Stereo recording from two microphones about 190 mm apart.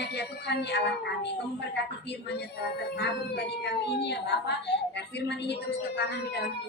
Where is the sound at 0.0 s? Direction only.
60° left (ahead or behind).